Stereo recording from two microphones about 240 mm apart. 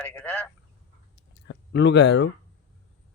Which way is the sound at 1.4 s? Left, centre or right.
Left.